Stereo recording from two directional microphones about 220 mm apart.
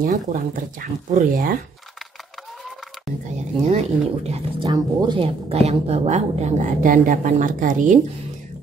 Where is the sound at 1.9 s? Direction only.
Centre (ahead or behind).